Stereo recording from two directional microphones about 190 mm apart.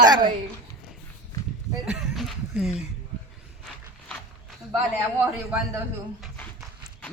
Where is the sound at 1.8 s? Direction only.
Centre (ahead or behind).